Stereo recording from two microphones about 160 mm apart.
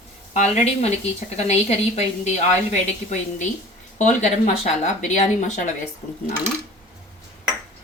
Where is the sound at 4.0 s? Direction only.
50° left (ahead or behind).